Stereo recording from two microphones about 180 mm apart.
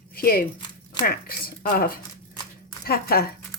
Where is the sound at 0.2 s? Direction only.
55° left (ahead or behind).